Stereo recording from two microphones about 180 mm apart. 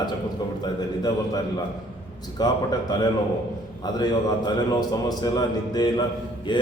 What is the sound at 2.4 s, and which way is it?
Speech, 25° left (ahead or behind).